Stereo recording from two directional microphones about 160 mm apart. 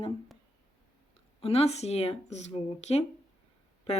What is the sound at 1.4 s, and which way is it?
A woman's voice, 40° left (ahead or behind).